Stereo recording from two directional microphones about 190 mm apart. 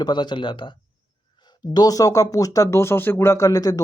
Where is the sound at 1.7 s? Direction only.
20° left (ahead or behind).